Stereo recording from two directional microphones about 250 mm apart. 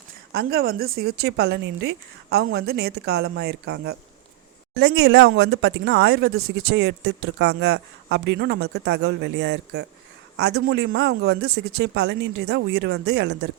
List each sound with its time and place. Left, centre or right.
0.3 s speech: right